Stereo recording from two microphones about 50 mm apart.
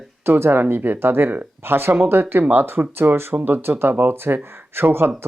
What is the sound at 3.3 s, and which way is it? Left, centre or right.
Speech, right.